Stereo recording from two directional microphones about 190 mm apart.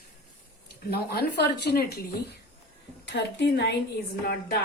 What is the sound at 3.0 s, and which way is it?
Speech, 65° left (ahead or behind).